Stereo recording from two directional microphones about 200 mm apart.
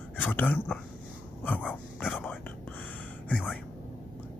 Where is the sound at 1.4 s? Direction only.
10° left (ahead or behind).